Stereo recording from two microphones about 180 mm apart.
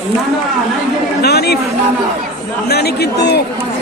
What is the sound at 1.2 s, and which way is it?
Speech, 60° left (ahead or behind).